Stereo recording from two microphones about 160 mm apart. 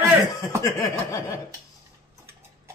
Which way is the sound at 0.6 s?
20° left (ahead or behind).